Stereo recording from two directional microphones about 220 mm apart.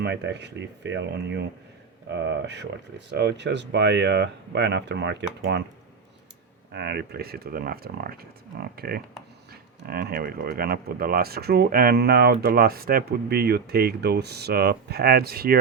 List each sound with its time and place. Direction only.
0.0 s speech: 50° right (ahead or behind)
6.7 s speech: 50° right (ahead or behind)